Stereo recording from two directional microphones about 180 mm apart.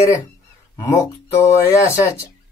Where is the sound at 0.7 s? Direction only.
15° left (ahead or behind).